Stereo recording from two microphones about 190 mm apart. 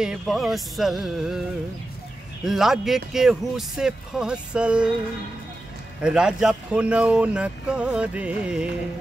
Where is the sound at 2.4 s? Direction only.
Centre (ahead or behind).